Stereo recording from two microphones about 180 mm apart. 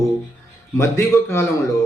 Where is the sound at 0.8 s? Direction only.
15° left (ahead or behind).